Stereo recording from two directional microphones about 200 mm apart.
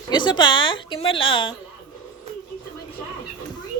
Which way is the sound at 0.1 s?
20° left (ahead or behind).